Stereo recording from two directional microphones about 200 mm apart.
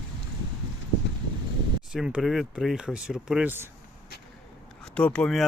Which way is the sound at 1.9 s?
5° right (ahead or behind).